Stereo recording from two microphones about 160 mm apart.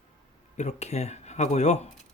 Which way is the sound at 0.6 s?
45° left (ahead or behind).